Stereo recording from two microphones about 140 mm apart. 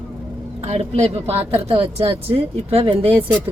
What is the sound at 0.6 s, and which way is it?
Speech, 45° right (ahead or behind).